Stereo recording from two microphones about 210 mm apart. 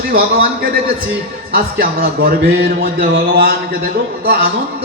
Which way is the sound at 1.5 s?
50° right (ahead or behind).